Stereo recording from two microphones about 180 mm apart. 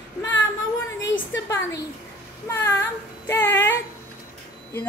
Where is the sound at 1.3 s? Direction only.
15° left (ahead or behind).